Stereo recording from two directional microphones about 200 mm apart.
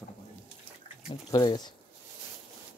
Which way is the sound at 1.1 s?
25° left (ahead or behind).